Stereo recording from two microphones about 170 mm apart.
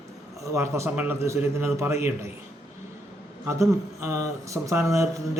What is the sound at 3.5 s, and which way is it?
A man's voice, 15° right (ahead or behind).